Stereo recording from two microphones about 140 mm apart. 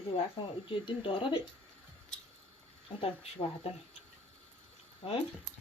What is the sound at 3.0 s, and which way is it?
Speech, 45° left (ahead or behind).